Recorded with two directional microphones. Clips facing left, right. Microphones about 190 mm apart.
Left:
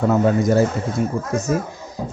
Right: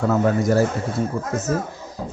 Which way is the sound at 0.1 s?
20° left (ahead or behind).